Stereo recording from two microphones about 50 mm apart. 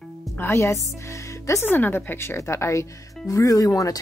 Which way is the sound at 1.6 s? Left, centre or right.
Left.